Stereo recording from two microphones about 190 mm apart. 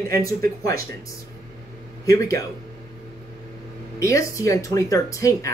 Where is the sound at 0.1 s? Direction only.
15° left (ahead or behind).